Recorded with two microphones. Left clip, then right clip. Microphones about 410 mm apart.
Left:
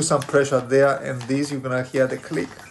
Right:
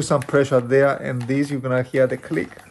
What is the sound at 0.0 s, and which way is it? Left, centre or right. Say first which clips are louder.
Speech: even; centre.